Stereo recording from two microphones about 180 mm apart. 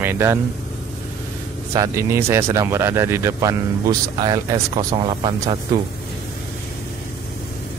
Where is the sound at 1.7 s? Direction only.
15° right (ahead or behind).